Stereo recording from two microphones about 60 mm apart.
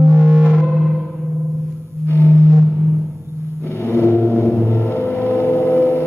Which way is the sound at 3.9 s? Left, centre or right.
Left.